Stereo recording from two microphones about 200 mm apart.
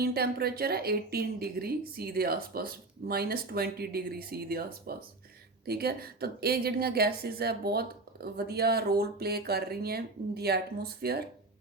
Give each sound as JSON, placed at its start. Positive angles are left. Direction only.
{"t": 0.0, "sound": "a woman's voice", "side_deg": -50}